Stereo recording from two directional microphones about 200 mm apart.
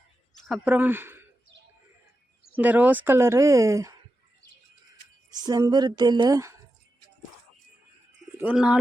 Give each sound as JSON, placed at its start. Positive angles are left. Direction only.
{"t": 0.4, "sound": "speech", "side_deg": -5}
{"t": 2.6, "sound": "speech", "side_deg": -10}
{"t": 5.3, "sound": "a woman's voice", "side_deg": -20}
{"t": 8.4, "sound": "speech", "side_deg": -5}